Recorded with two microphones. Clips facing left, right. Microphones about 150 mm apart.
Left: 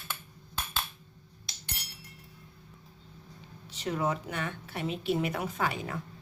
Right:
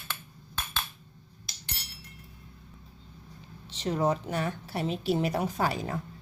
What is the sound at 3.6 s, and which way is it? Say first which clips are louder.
Speech: right 4 dB; 30° right (ahead or behind).